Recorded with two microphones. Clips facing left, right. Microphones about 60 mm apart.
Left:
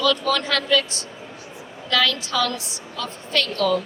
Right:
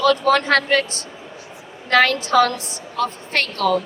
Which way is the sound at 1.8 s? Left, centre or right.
Right.